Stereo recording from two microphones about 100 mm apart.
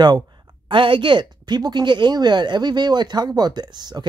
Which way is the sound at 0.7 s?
60° right (ahead or behind).